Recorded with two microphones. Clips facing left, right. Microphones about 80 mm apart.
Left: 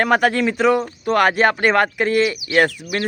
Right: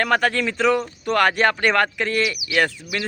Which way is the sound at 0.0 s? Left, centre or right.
Centre.